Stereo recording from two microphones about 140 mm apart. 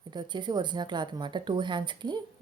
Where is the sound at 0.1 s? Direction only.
30° right (ahead or behind).